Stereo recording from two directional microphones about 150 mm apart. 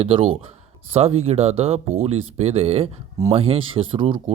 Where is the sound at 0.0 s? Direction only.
35° right (ahead or behind).